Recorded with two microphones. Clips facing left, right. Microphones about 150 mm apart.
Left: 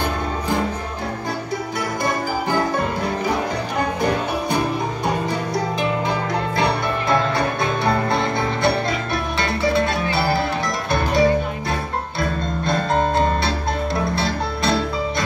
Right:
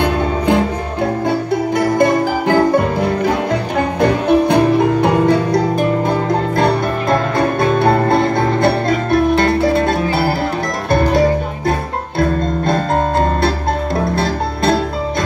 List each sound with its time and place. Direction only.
0.0 s music: 70° right (ahead or behind)
1.8 s music: 55° right (ahead or behind)
4.0 s music: 65° right (ahead or behind)
14.1 s music: 50° right (ahead or behind)